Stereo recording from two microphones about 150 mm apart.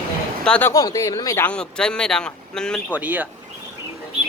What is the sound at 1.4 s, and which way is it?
A man's voice, 5° left (ahead or behind).